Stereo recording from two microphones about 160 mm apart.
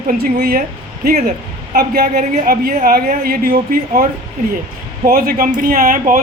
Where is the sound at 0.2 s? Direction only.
70° right (ahead or behind).